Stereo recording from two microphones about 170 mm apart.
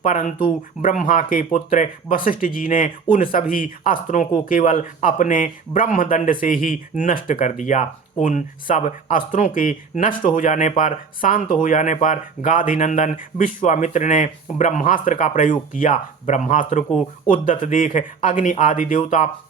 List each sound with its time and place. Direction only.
0.0 s speech: 50° left (ahead or behind)